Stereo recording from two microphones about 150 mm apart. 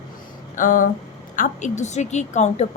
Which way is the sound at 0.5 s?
65° left (ahead or behind).